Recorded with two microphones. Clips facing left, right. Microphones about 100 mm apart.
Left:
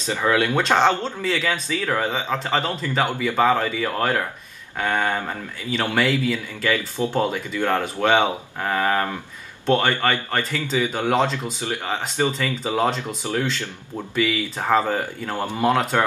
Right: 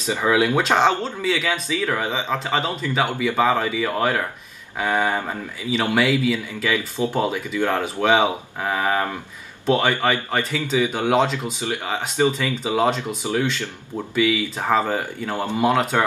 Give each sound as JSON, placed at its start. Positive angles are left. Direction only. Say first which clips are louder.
{"t": 0.0, "sound": "speech", "louder": "right 1 dB", "side_deg": -15}
{"t": 11.6, "sound": "speech", "louder": "even", "side_deg": -15}